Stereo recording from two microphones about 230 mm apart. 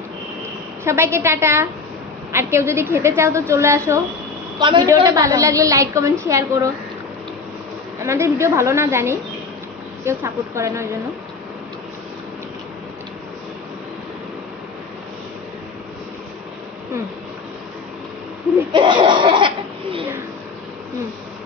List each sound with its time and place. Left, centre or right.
0.8 s a woman's voice: centre
8.0 s a woman's voice: centre
18.7 s laughter: centre